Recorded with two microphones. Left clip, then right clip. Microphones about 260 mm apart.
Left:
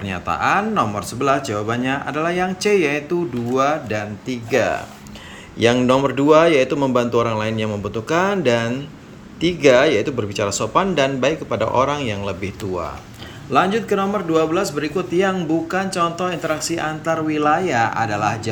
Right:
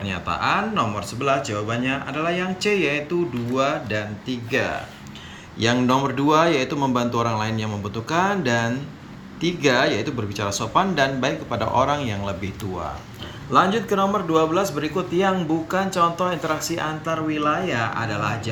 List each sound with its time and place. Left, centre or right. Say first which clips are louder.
0.0 s speech: left 3 dB; centre